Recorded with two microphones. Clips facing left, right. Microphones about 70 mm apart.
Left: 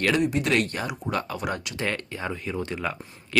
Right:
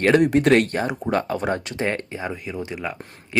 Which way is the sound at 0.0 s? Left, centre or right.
Right.